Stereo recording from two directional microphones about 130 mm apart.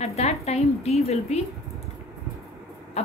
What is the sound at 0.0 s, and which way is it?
A woman's voice, 55° left (ahead or behind).